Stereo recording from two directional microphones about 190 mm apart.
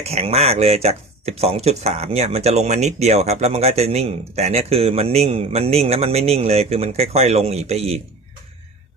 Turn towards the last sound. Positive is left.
turn(degrees=-35)  # may be behind; listen again after turning